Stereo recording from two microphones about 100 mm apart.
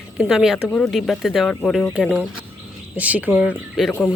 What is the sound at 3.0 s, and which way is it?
Speech, 15° right (ahead or behind).